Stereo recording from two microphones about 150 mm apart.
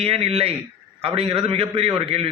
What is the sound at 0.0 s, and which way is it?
Speech, 40° right (ahead or behind).